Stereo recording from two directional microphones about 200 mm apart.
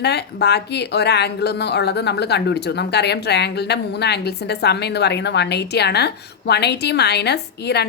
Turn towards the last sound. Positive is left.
turn(degrees=55)  # may be behind; listen again after turning